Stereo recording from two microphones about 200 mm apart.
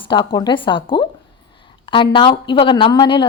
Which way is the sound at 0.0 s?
25° left (ahead or behind).